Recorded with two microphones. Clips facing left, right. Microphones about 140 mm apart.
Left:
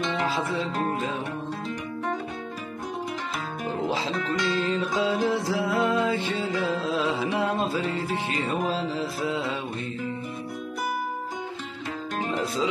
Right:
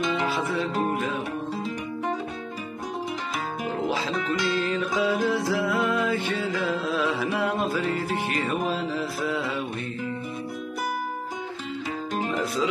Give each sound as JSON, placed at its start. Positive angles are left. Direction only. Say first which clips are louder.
{"t": 3.6, "sound": "music", "louder": "even", "side_deg": 30}